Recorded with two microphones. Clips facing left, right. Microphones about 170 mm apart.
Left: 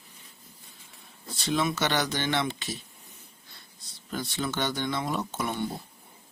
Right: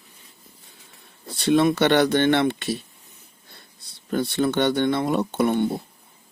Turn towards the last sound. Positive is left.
turn(degrees=-60)  # may be behind; listen again after turning